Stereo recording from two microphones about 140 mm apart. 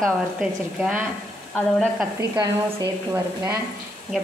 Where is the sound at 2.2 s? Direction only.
20° right (ahead or behind).